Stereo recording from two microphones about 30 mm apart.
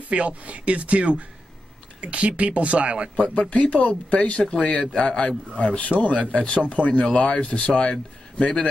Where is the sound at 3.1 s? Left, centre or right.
Left.